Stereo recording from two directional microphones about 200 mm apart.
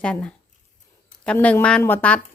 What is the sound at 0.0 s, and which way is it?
Speech, 5° left (ahead or behind).